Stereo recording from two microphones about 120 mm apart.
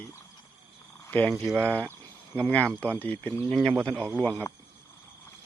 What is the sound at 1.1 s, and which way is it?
Speech, 15° left (ahead or behind).